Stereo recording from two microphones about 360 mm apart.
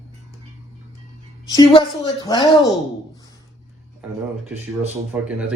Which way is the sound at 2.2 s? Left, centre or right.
Centre.